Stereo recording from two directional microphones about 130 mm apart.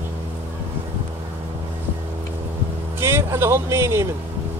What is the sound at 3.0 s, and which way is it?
Vehicle, 20° right (ahead or behind).